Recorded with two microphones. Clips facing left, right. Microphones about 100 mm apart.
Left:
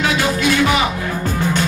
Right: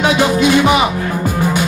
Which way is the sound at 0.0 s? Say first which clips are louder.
Right 5 dB; 20° right (ahead or behind).